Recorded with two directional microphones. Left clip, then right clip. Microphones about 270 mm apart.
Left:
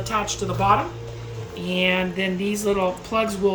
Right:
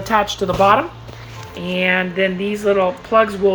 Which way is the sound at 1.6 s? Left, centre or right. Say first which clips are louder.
Right 4 dB; centre.